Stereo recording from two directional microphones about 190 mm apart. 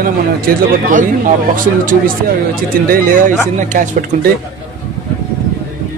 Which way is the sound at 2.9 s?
45° right (ahead or behind).